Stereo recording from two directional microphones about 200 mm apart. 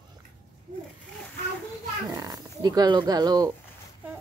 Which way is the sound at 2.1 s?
20° right (ahead or behind).